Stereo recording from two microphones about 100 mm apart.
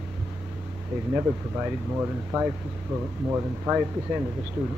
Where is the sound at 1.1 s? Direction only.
25° right (ahead or behind).